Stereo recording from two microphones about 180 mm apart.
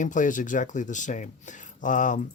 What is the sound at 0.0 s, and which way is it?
Speech, 45° left (ahead or behind).